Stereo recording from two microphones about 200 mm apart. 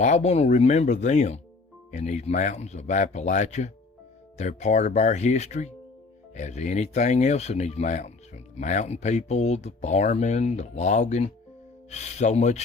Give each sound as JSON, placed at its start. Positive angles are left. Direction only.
{"t": 0.0, "sound": "speech", "side_deg": 35}